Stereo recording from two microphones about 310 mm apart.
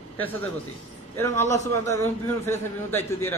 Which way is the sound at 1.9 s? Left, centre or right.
Centre.